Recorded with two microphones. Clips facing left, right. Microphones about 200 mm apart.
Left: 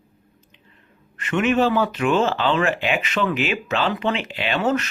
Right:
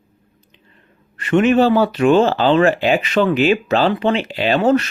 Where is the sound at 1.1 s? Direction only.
35° right (ahead or behind).